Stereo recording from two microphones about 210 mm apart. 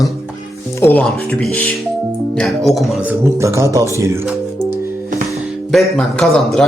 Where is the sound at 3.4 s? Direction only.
15° right (ahead or behind).